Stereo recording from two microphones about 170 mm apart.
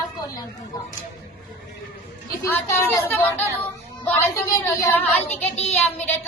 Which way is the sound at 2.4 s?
15° left (ahead or behind).